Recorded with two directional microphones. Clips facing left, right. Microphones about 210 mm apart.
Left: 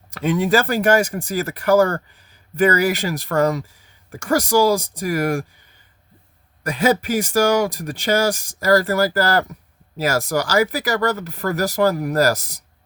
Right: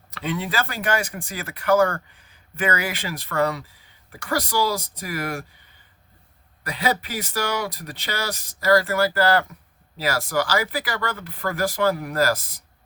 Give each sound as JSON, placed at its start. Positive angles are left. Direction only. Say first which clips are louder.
{"t": 0.1, "sound": "speech", "louder": "left 9 dB", "side_deg": 45}
{"t": 6.6, "sound": "speech", "louder": "left 7 dB", "side_deg": 45}